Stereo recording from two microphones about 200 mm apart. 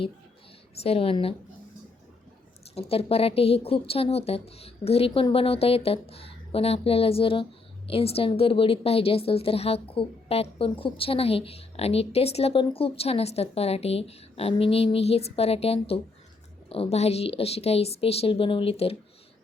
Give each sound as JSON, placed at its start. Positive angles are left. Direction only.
{"t": 0.8, "sound": "a woman's voice", "side_deg": 30}
{"t": 2.7, "sound": "a woman's voice", "side_deg": 30}